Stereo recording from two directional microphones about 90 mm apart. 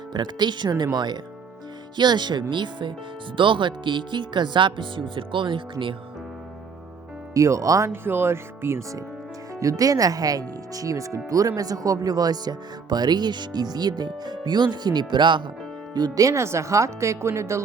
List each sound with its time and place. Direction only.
0.1 s speech: 55° right (ahead or behind)
7.3 s speech: 40° right (ahead or behind)
8.0 s speech: 25° right (ahead or behind); by 15.4 s 60° right (ahead or behind)
16.0 s speech: 45° right (ahead or behind)